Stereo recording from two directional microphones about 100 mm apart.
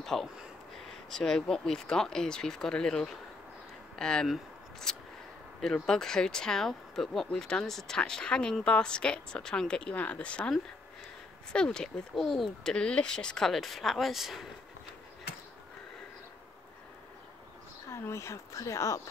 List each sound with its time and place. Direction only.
0.0 s speech: 5° left (ahead or behind)
4.3 s scissors: 5° left (ahead or behind)
5.6 s speech: 5° left (ahead or behind)
17.8 s speech: 30° left (ahead or behind)